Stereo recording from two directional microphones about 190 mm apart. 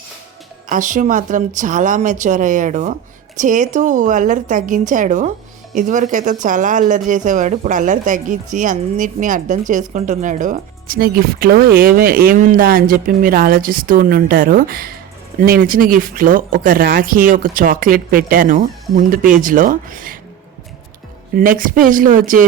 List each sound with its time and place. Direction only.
0.7 s speech: 40° right (ahead or behind)
21.3 s speech: 45° right (ahead or behind)